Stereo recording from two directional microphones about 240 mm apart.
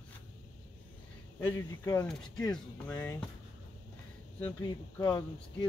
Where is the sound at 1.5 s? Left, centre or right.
Centre.